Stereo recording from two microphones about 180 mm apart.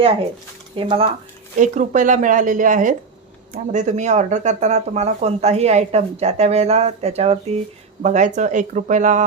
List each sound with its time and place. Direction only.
0.0 s speech: 30° right (ahead or behind)
1.5 s speech: 45° right (ahead or behind)